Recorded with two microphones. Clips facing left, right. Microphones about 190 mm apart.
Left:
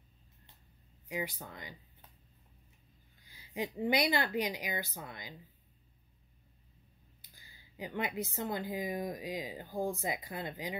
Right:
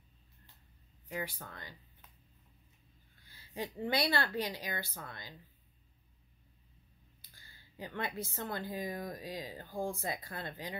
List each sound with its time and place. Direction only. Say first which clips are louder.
1.0 s a woman's voice: left 2 dB; 15° left (ahead or behind)
3.3 s a woman's voice: left 3 dB; 15° left (ahead or behind)
7.3 s a woman's voice: left 2 dB; 15° left (ahead or behind)